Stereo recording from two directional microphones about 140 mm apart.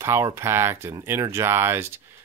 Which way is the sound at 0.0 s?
20° right (ahead or behind).